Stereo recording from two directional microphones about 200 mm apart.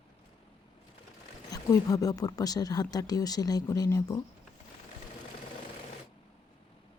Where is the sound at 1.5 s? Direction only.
15° left (ahead or behind).